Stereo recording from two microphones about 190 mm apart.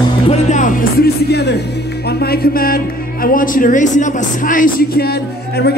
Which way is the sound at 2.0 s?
55° left (ahead or behind).